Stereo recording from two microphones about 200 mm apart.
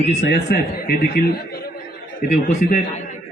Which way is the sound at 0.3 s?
55° left (ahead or behind).